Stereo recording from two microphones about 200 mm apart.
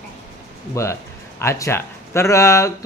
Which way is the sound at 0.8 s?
15° left (ahead or behind).